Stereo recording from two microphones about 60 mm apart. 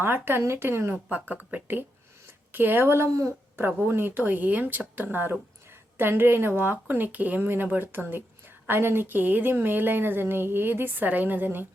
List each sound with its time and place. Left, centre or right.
0.0 s speech: right
1.1 s speech: right
3.8 s speech: right